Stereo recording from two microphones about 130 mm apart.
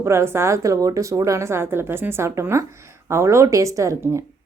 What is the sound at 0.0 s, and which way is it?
Speech, 20° right (ahead or behind).